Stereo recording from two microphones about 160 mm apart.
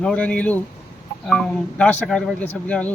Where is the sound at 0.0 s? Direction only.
5° left (ahead or behind).